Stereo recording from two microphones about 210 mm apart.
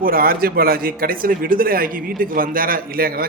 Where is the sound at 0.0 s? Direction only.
45° right (ahead or behind).